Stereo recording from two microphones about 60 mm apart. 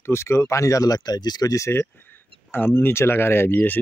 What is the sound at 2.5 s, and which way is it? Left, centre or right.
Speech, left.